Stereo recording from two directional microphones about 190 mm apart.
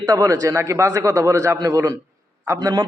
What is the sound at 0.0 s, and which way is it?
Speech, 20° right (ahead or behind).